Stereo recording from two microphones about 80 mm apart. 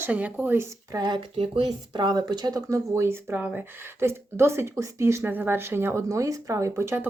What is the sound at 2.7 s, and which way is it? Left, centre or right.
Speech, right.